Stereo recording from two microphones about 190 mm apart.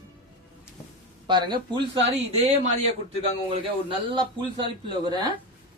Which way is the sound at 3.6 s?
25° right (ahead or behind).